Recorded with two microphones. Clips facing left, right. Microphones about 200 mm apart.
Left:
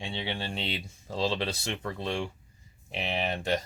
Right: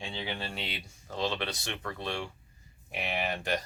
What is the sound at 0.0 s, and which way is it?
Speech, 30° left (ahead or behind).